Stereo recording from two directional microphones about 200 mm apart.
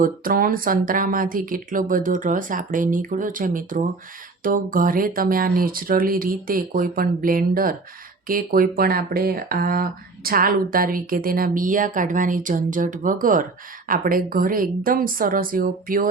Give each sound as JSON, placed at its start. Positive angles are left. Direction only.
{"t": 0.0, "sound": "speech", "side_deg": -45}